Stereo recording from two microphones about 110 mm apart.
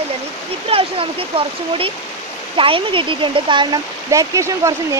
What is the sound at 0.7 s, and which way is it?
Speech, 55° right (ahead or behind).